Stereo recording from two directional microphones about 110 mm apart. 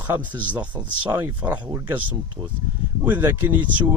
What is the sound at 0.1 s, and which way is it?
Speech, 15° right (ahead or behind).